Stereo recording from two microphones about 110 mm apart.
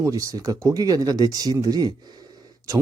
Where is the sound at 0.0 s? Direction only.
30° right (ahead or behind).